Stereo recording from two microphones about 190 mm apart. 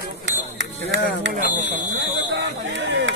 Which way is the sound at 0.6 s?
70° right (ahead or behind).